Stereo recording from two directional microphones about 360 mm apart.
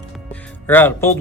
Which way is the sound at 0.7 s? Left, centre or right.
Centre.